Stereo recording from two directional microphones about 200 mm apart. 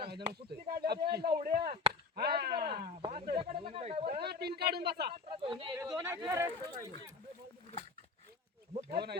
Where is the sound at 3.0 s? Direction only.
30° right (ahead or behind).